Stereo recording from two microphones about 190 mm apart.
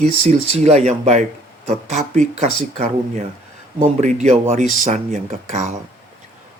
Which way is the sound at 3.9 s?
40° right (ahead or behind).